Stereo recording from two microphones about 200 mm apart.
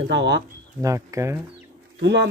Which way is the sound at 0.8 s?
15° right (ahead or behind).